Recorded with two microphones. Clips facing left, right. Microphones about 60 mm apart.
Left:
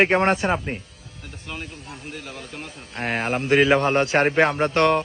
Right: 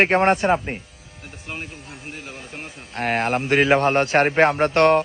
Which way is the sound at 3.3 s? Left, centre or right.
Right.